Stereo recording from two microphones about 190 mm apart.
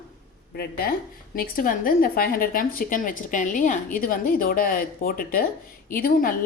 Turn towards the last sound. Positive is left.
turn(degrees=50)  # may be behind; listen again after turning